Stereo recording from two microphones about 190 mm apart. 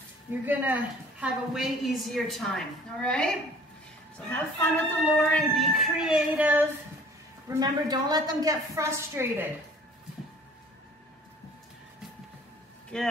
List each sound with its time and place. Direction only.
0.3 s a woman's voice: 10° right (ahead or behind)
7.4 s a woman's voice: 20° right (ahead or behind)
12.9 s a woman's voice: 5° left (ahead or behind)